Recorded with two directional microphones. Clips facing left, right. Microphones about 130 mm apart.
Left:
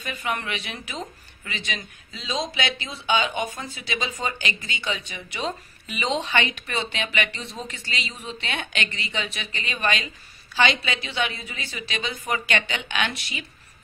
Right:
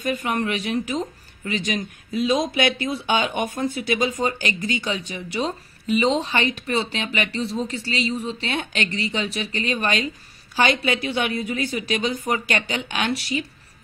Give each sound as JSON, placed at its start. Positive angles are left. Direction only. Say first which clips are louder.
{"t": 0.0, "sound": "a woman's voice", "louder": "right 6 dB", "side_deg": -45}